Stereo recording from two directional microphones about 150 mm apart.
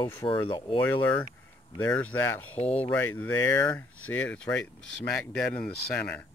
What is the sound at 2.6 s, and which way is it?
Speech, 40° left (ahead or behind).